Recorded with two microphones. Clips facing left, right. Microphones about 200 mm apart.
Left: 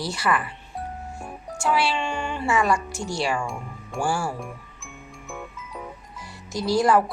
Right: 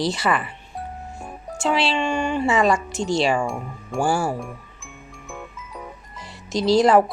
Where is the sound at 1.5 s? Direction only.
20° right (ahead or behind).